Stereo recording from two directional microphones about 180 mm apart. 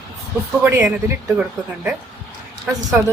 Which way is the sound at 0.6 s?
10° right (ahead or behind).